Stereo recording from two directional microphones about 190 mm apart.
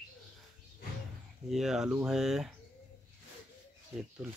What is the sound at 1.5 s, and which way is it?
Speech, centre (ahead or behind).